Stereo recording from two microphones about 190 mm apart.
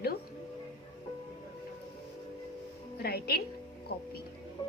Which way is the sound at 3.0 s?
55° left (ahead or behind).